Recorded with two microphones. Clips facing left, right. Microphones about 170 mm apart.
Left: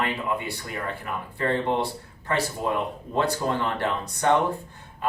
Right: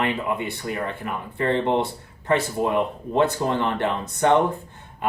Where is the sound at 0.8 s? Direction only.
20° right (ahead or behind).